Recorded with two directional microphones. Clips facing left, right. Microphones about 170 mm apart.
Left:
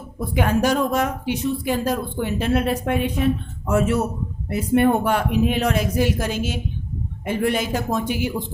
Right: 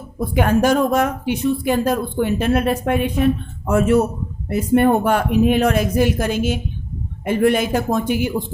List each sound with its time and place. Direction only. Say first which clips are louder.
0.2 s speech: right 4 dB; 50° right (ahead or behind)